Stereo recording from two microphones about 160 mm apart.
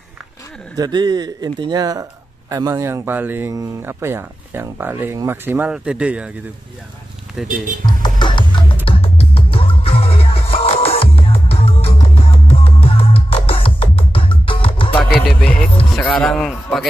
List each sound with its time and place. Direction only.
0.7 s speech: 25° right (ahead or behind); by 6.3 s 5° right (ahead or behind)
7.4 s a man's voice: 5° right (ahead or behind)
7.8 s music: 25° left (ahead or behind)
15.1 s music: 5° left (ahead or behind)
16.0 s a man's voice: 5° left (ahead or behind)